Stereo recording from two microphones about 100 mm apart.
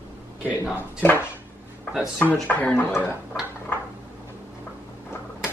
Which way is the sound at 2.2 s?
15° left (ahead or behind).